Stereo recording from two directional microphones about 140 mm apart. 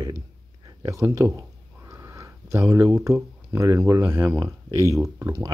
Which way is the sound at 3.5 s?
20° right (ahead or behind).